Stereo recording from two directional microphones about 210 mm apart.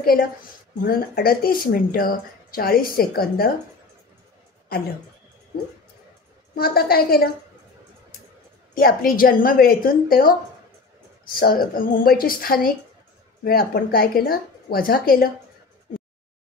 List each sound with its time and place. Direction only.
0.0 s a woman's voice: 45° left (ahead or behind)
6.5 s speech: 45° left (ahead or behind)
8.7 s speech: 45° left (ahead or behind)